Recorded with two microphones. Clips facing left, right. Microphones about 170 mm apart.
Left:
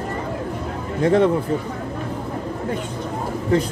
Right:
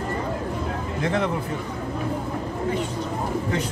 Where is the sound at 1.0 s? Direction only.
35° left (ahead or behind).